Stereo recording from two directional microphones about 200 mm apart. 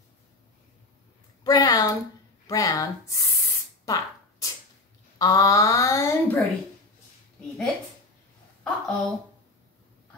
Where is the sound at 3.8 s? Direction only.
15° left (ahead or behind).